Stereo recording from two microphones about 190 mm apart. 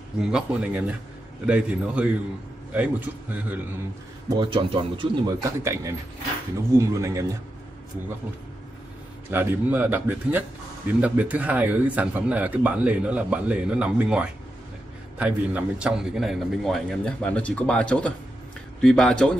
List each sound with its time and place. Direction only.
0.2 s a man's voice: 5° right (ahead or behind)
4.4 s speech: 25° right (ahead or behind)
9.3 s a man's voice: 10° right (ahead or behind)